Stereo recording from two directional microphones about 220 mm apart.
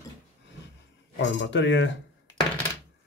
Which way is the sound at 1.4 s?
55° left (ahead or behind).